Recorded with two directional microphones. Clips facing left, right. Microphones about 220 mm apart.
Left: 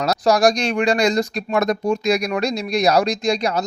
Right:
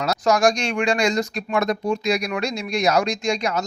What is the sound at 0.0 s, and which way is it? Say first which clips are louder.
Speech: left 2 dB; 35° left (ahead or behind).